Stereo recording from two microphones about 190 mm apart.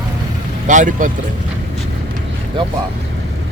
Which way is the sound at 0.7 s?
40° right (ahead or behind).